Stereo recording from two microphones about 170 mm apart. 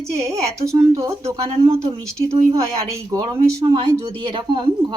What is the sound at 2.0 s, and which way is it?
Speech, 20° right (ahead or behind).